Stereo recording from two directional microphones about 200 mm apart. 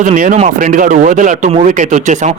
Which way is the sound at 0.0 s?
40° right (ahead or behind).